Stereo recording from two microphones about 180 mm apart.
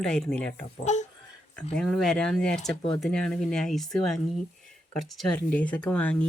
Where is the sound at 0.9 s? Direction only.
40° left (ahead or behind).